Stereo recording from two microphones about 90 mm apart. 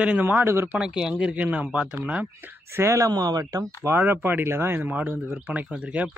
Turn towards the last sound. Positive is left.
turn(degrees=-10)  # may be behind; listen again after turning